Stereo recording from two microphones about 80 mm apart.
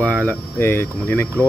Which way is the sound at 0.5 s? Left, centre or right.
Left.